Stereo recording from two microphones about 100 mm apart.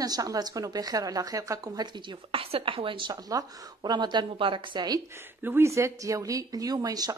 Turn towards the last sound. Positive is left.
turn(degrees=-40)  # may be behind; listen again after turning